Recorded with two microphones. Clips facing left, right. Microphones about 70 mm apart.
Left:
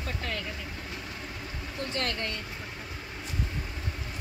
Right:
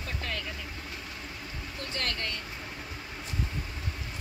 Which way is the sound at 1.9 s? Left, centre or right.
Centre.